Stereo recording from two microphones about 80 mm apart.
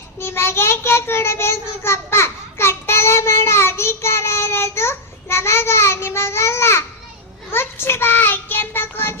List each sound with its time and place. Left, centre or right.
0.2 s child singing: left